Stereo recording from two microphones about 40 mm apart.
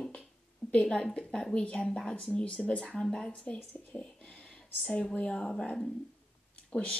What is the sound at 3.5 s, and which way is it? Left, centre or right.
Speech, left.